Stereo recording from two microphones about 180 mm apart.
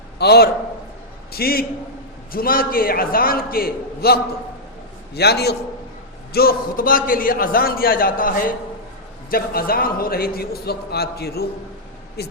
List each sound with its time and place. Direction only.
0.2 s a man's voice: 65° left (ahead or behind)